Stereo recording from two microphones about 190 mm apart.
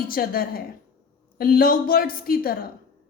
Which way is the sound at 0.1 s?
50° left (ahead or behind).